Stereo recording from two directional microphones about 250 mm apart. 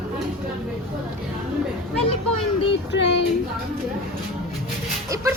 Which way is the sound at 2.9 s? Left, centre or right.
Left.